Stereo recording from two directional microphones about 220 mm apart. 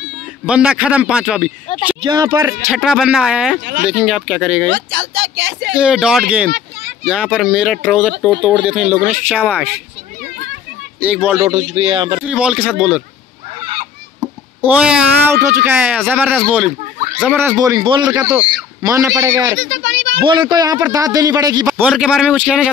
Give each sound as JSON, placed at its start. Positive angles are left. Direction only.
{"t": 0.5, "sound": "speech", "side_deg": -5}
{"t": 2.0, "sound": "speech", "side_deg": -15}
{"t": 2.7, "sound": "speech", "side_deg": -5}
{"t": 4.6, "sound": "speech", "side_deg": -55}
{"t": 5.8, "sound": "speech", "side_deg": -5}
{"t": 11.0, "sound": "speech", "side_deg": -5}
{"t": 11.5, "sound": "speech", "side_deg": -30}
{"t": 12.3, "sound": "speech", "side_deg": -5}
{"t": 14.2, "sound": "speech", "side_deg": -5}
{"t": 18.0, "sound": "speech", "side_deg": -5}
{"t": 19.5, "sound": "a child's voice", "side_deg": -55}
{"t": 20.2, "sound": "speech", "side_deg": -20}
{"t": 21.6, "sound": "speech", "side_deg": -5}